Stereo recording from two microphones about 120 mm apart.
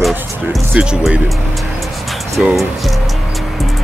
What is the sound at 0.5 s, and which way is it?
Speech, 5° right (ahead or behind).